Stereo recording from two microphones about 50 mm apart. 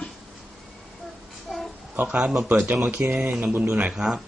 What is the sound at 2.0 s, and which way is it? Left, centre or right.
Speech, right.